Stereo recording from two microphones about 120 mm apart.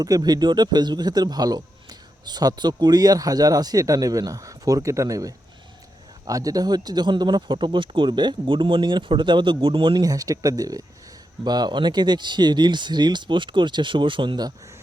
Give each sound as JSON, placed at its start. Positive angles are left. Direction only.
{"t": 0.0, "sound": "speech", "side_deg": -35}
{"t": 10.0, "sound": "speech", "side_deg": -30}